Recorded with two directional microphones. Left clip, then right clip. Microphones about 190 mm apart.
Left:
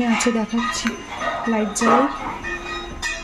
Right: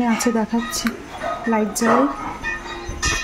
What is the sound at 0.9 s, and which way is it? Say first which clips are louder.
Speech: even; 65° right (ahead or behind).